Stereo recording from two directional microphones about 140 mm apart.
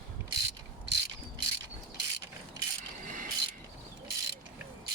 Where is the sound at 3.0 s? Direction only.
70° right (ahead or behind).